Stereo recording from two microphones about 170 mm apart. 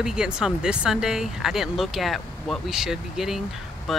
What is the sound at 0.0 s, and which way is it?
A woman's voice, 5° right (ahead or behind).